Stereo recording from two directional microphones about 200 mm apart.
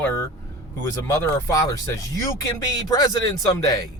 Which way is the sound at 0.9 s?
15° left (ahead or behind).